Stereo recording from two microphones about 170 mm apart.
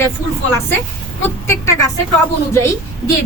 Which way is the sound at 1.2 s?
15° left (ahead or behind).